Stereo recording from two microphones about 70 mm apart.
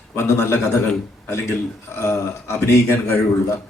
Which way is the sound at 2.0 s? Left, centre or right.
Left.